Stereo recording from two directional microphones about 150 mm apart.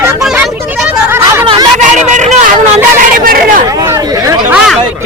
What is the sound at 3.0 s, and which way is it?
Speech, 75° right (ahead or behind).